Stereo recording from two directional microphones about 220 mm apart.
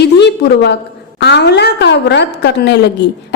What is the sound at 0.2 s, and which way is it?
A woman's voice, 50° left (ahead or behind).